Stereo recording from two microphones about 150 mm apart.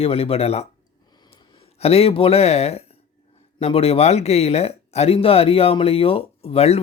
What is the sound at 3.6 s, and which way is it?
Speech, 40° left (ahead or behind).